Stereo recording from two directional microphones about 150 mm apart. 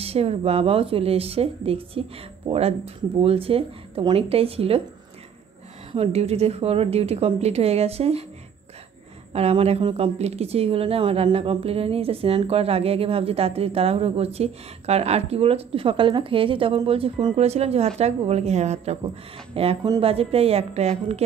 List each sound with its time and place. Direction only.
0.0 s a woman's voice: 40° right (ahead or behind)
5.9 s a woman's voice: 40° right (ahead or behind)
9.3 s a woman's voice: 45° right (ahead or behind)